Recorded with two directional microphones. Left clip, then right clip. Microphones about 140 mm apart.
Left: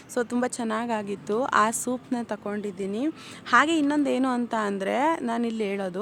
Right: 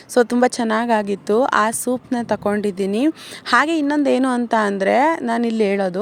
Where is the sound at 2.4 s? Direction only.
65° right (ahead or behind).